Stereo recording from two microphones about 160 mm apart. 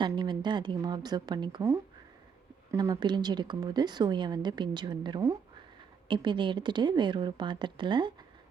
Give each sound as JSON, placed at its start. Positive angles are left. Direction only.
{"t": 0.0, "sound": "a woman's voice", "side_deg": -30}